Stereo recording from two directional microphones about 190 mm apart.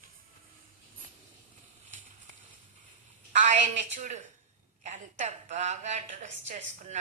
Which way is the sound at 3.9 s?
40° right (ahead or behind).